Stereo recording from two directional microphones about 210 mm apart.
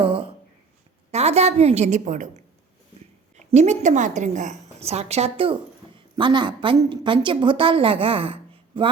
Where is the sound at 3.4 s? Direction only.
35° right (ahead or behind).